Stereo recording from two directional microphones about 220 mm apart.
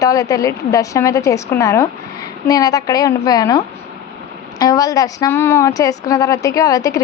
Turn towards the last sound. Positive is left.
turn(degrees=15)  # may be behind; listen again after turning